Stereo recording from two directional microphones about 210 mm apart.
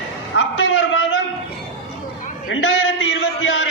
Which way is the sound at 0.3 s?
65° left (ahead or behind).